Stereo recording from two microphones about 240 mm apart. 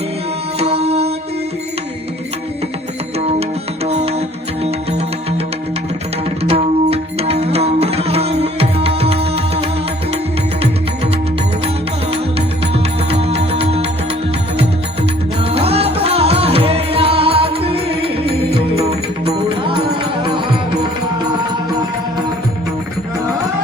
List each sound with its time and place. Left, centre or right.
0.6 s mantra: right
3.8 s music: right
6.4 s music: right
12.7 s music: right
15.4 s music: right